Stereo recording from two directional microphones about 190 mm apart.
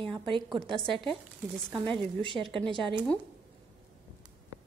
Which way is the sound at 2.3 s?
Centre (ahead or behind).